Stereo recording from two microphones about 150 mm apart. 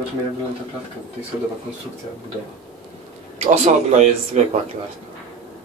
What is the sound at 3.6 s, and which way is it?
Speech, 50° right (ahead or behind).